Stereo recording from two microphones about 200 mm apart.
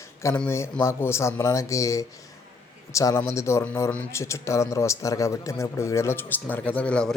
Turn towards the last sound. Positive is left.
turn(degrees=5)  # may be behind; listen again after turning